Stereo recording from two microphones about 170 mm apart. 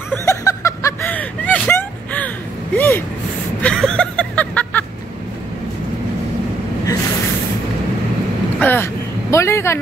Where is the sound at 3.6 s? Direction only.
5° left (ahead or behind).